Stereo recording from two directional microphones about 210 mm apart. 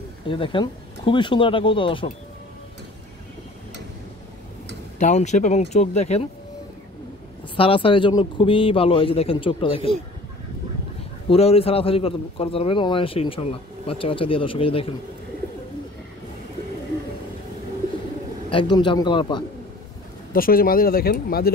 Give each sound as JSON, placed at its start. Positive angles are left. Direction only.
{"t": 0.3, "sound": "a man's voice", "side_deg": 25}
{"t": 4.9, "sound": "speech", "side_deg": 35}
{"t": 7.5, "sound": "a man's voice", "side_deg": 25}
{"t": 11.2, "sound": "a man's voice", "side_deg": 25}
{"t": 18.5, "sound": "a man's voice", "side_deg": 20}
{"t": 20.3, "sound": "speech", "side_deg": 45}